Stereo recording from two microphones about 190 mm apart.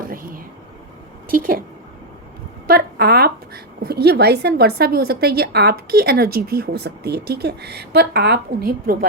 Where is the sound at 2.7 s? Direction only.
55° right (ahead or behind).